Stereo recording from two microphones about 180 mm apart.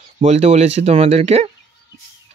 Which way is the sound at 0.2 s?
35° right (ahead or behind).